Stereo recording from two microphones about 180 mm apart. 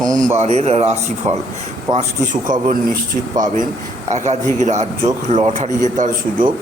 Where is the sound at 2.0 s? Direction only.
45° right (ahead or behind).